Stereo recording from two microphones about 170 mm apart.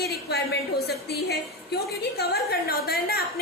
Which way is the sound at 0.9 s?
70° left (ahead or behind).